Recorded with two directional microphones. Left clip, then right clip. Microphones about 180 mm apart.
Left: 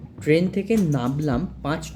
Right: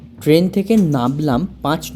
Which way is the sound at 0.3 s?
35° right (ahead or behind).